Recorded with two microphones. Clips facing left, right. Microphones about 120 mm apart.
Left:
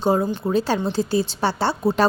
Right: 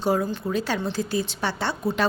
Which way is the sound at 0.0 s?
25° left (ahead or behind).